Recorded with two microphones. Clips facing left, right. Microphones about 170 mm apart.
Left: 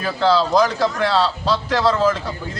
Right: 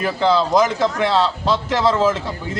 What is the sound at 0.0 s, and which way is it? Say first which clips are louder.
A man's voice: even; 15° right (ahead or behind).